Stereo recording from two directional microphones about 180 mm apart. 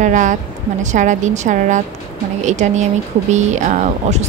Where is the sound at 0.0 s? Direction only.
45° right (ahead or behind).